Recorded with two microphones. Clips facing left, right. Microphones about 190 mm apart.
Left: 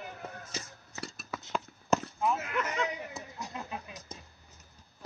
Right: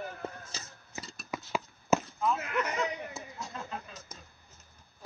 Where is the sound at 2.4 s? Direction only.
Centre (ahead or behind).